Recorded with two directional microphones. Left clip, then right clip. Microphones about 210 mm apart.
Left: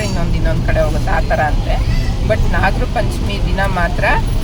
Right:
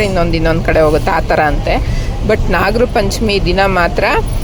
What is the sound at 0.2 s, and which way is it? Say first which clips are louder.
Speech: right 9 dB; 40° right (ahead or behind).